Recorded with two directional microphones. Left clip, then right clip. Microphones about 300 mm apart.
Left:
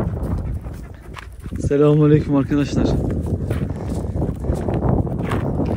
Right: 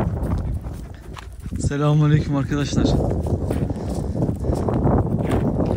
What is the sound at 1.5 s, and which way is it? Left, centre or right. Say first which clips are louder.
Speech: left 7 dB; centre.